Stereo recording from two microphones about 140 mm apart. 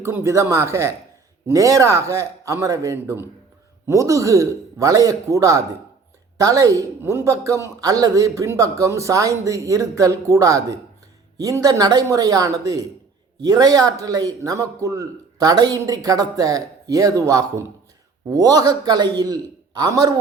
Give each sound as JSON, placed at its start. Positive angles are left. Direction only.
{"t": 0.0, "sound": "a woman's voice", "side_deg": -20}